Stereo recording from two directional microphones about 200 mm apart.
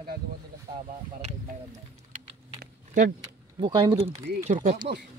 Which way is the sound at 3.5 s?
25° right (ahead or behind).